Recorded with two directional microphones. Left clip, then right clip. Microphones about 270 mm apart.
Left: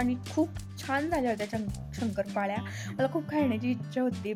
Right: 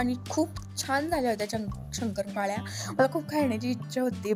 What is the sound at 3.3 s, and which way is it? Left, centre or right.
Speech, centre.